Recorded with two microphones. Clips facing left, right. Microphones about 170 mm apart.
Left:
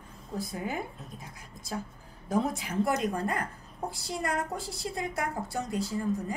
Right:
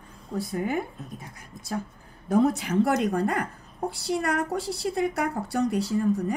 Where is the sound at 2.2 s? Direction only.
65° right (ahead or behind).